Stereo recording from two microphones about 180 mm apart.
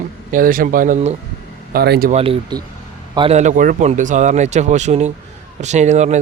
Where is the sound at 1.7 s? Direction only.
60° right (ahead or behind).